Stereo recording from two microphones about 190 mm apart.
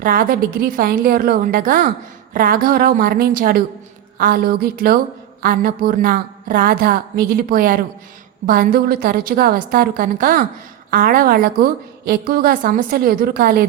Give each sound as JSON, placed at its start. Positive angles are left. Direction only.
{"t": 0.0, "sound": "a woman's voice", "side_deg": -50}